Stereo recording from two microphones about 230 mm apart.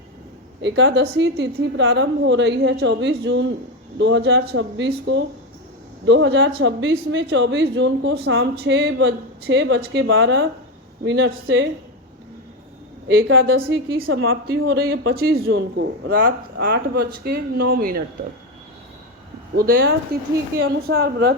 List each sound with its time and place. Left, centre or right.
0.6 s speech: right
13.1 s a woman's voice: right
13.7 s a woman's voice: right
14.1 s a woman's voice: right
14.6 s speech: right
19.5 s a woman's voice: right